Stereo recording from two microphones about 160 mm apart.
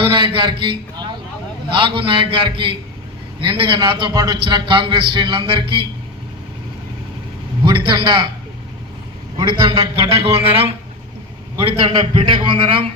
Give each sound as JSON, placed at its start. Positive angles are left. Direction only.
{"t": 0.0, "sound": "a man's voice", "side_deg": -30}
{"t": 7.6, "sound": "a man's voice", "side_deg": -30}
{"t": 9.4, "sound": "a man's voice", "side_deg": -30}